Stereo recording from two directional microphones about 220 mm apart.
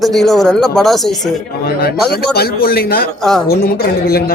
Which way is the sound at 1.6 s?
45° left (ahead or behind).